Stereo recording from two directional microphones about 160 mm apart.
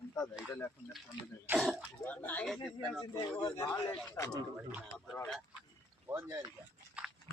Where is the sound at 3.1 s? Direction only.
25° left (ahead or behind).